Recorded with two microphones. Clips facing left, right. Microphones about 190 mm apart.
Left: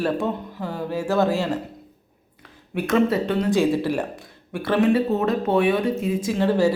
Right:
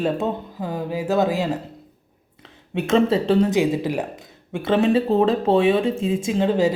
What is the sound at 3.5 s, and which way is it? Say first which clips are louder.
A woman's voice: even; 15° right (ahead or behind).